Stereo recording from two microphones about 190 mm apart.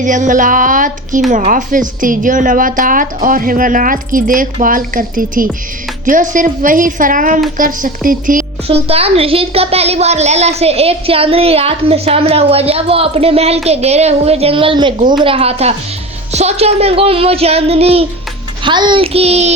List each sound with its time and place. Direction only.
0.0 s a woman's voice: 40° right (ahead or behind)
8.6 s a woman's voice: 30° right (ahead or behind)